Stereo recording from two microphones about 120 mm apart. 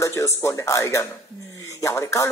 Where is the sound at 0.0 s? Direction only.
25° left (ahead or behind).